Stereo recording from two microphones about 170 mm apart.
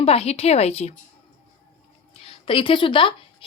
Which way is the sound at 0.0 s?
35° left (ahead or behind).